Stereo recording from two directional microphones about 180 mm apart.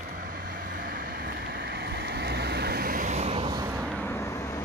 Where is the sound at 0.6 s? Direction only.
55° right (ahead or behind); by 3.5 s 35° right (ahead or behind).